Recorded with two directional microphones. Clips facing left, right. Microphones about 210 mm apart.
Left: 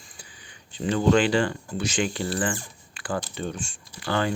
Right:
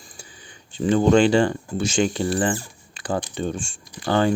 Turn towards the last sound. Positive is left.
turn(degrees=-30)  # may be behind; listen again after turning